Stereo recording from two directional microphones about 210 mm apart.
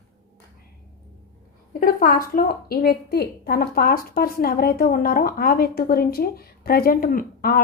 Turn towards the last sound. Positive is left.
turn(degrees=45)  # may be behind; listen again after turning